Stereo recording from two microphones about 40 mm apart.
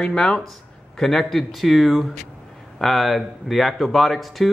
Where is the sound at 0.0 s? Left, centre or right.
Centre.